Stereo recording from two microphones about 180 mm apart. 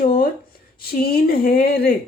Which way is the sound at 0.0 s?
50° left (ahead or behind).